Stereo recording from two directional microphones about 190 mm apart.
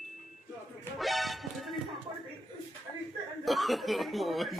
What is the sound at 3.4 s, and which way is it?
Chuckle, centre (ahead or behind).